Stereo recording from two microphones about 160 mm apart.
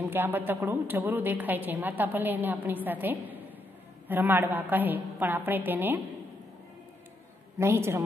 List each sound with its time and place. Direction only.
0.0 s a woman's voice: 15° right (ahead or behind)
7.5 s a woman's voice: 15° right (ahead or behind)